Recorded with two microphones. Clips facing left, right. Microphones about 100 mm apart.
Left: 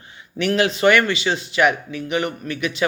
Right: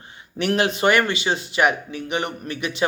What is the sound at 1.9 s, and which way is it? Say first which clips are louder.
Speech: left 2 dB; 30° right (ahead or behind).